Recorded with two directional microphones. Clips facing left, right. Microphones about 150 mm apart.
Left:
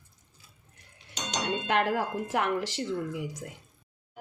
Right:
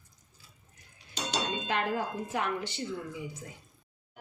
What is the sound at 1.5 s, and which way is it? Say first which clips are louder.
Speech: left 7 dB; 75° left (ahead or behind).